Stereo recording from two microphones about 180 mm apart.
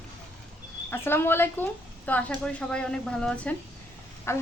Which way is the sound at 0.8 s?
10° left (ahead or behind).